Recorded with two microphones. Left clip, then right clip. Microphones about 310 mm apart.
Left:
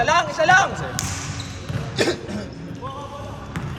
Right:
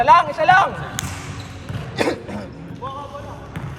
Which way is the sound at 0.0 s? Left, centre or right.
Centre.